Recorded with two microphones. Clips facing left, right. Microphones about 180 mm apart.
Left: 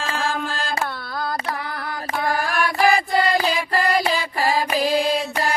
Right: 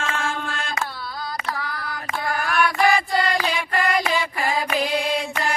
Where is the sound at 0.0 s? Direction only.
35° left (ahead or behind).